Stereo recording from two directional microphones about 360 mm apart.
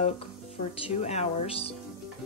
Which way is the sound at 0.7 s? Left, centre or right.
Centre.